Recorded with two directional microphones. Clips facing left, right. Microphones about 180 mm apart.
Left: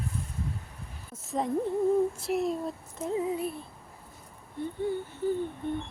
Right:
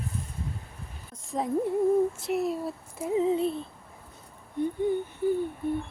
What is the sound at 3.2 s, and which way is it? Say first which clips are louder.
Speech: right 8 dB; 25° right (ahead or behind).